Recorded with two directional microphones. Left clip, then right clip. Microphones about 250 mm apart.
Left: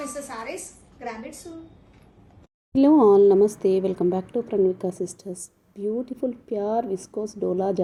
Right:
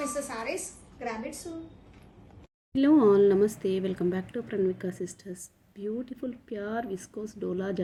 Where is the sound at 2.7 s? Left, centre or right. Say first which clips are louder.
Left 6 dB; centre.